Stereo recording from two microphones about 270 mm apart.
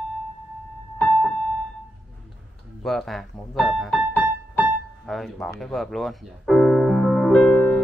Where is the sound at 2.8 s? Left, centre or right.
Centre.